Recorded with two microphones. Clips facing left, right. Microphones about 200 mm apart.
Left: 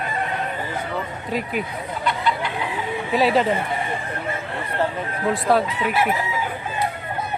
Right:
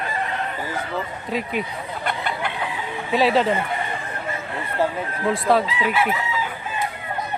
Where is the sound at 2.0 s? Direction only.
55° right (ahead or behind).